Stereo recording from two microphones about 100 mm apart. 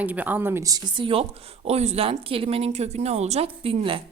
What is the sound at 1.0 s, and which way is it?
A woman's voice, 70° right (ahead or behind).